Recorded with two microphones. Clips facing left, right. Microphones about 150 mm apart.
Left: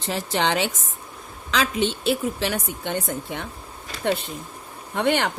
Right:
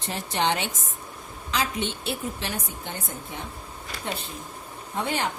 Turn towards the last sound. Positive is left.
turn(degrees=75)  # may be behind; listen again after turning